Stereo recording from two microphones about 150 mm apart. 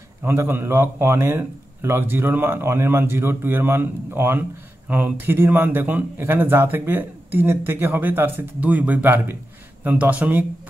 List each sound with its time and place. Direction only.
0.2 s speech: 15° right (ahead or behind)